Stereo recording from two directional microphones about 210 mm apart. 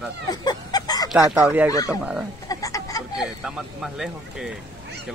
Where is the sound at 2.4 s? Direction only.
15° left (ahead or behind).